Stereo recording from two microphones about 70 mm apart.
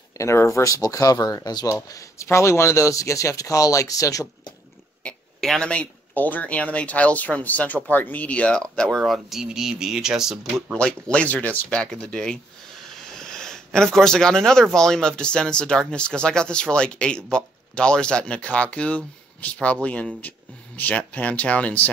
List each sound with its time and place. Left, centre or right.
0.2 s speech: left
1.9 s speech: left
2.2 s speech: left
5.4 s speech: centre
5.7 s speech: left
9.0 s speech: centre
10.5 s speech: centre